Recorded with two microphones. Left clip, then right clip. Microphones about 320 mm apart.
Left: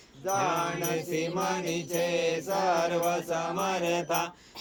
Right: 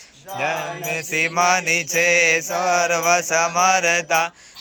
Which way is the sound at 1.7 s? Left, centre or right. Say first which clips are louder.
Right 12 dB; left.